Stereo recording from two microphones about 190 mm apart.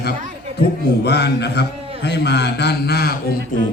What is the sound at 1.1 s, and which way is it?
A man's voice, 60° left (ahead or behind).